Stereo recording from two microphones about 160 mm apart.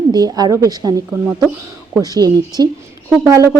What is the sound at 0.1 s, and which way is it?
A woman's voice, 25° right (ahead or behind).